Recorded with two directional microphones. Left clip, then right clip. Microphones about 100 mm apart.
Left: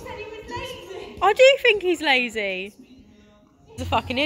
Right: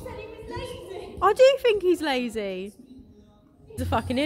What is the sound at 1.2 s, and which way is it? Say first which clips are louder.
Speech: left 3 dB; 40° right (ahead or behind).